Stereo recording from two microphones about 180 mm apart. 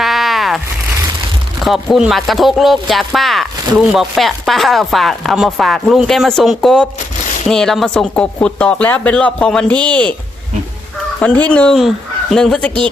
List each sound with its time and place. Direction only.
0.0 s a sound: centre (ahead or behind)
1.6 s speech: centre (ahead or behind)
11.2 s speech: 5° left (ahead or behind)